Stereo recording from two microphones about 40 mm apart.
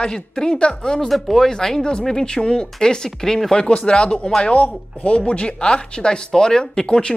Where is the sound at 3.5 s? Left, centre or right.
Left.